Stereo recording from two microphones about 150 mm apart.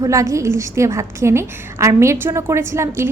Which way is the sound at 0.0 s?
20° right (ahead or behind).